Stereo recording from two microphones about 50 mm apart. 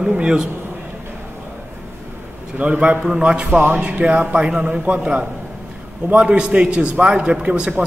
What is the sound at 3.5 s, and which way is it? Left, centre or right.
Speech, right.